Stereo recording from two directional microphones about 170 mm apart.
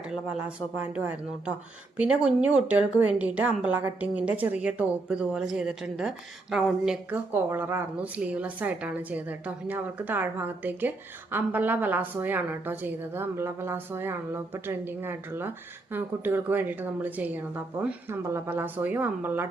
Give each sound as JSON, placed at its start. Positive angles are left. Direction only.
{"t": 0.1, "sound": "a woman's voice", "side_deg": -5}